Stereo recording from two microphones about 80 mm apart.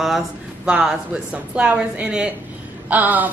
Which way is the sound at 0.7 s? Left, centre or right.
Centre.